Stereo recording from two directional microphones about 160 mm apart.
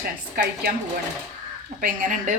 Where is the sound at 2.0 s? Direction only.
55° right (ahead or behind).